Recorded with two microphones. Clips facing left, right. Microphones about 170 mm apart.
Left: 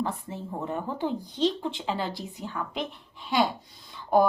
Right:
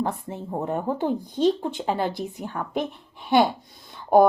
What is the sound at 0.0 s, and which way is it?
Speech, 50° right (ahead or behind).